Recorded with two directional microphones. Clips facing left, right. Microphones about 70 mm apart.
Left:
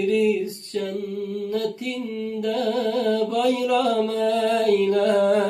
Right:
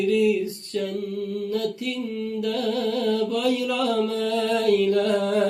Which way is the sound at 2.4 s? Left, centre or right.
Left.